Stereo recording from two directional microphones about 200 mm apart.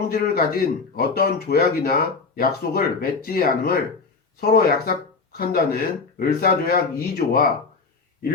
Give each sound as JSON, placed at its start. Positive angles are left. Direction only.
{"t": 0.1, "sound": "a man's voice", "side_deg": 50}